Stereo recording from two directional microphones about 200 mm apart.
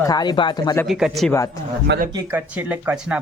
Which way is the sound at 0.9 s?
Centre (ahead or behind).